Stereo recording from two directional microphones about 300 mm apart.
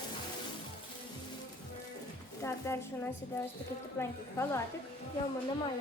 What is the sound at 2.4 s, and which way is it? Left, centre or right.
A woman's voice, centre.